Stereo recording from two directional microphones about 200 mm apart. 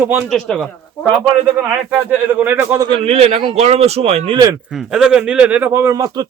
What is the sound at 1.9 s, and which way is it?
Speech, 10° right (ahead or behind).